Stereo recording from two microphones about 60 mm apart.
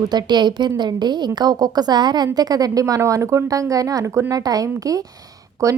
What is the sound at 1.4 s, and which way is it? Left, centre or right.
Speech, right.